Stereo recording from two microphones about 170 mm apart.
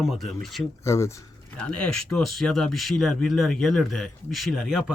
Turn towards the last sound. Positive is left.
turn(degrees=0)  # may be behind; listen again after turning